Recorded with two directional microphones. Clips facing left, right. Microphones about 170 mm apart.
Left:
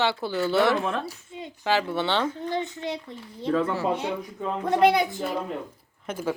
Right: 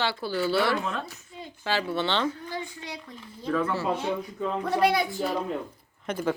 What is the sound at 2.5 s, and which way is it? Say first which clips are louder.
A child's voice: left 7 dB; 25° left (ahead or behind).